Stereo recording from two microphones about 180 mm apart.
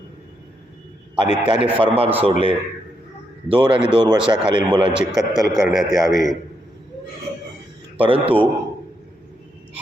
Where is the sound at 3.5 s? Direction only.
30° right (ahead or behind).